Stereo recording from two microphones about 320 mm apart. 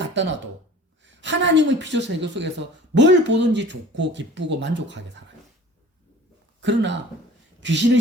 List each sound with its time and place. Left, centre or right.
0.0 s a sound: right
1.0 s a woman's voice: right
6.6 s a woman's voice: right